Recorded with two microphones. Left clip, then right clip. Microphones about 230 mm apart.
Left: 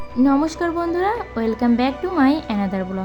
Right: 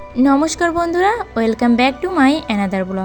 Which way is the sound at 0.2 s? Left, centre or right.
Right.